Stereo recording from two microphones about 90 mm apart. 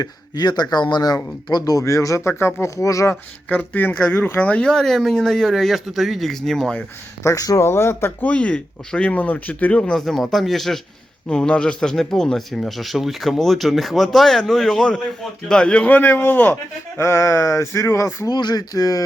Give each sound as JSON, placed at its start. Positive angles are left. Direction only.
{"t": 0.0, "sound": "speech", "side_deg": 50}
{"t": 1.8, "sound": "speech", "side_deg": 40}
{"t": 3.5, "sound": "speech", "side_deg": 20}
{"t": 7.2, "sound": "speech", "side_deg": 40}
{"t": 7.7, "sound": "speech", "side_deg": 25}
{"t": 8.3, "sound": "speech", "side_deg": 10}
{"t": 18.3, "sound": "speech", "side_deg": 50}